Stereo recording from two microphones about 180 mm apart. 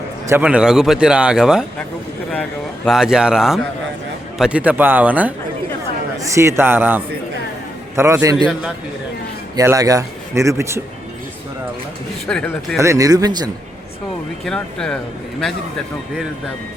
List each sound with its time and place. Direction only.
0.3 s a man's voice: 10° right (ahead or behind)
9.6 s speech: 20° right (ahead or behind)
12.3 s a man's voice: 5° left (ahead or behind)
12.8 s speech: 20° right (ahead or behind)
14.4 s a man's voice: 5° left (ahead or behind)